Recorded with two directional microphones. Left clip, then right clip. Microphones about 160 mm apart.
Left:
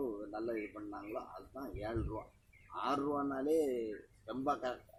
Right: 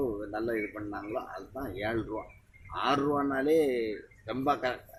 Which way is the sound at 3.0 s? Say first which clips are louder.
Right 8 dB; 15° right (ahead or behind).